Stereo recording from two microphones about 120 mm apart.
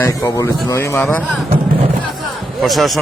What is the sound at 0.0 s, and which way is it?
Speech, 25° left (ahead or behind).